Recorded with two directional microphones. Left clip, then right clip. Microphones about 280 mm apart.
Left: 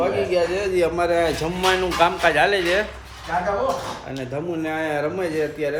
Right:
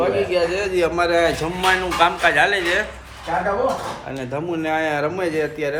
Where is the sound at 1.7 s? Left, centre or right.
Left.